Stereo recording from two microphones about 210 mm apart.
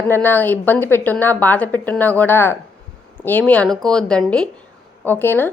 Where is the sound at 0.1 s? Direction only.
10° left (ahead or behind).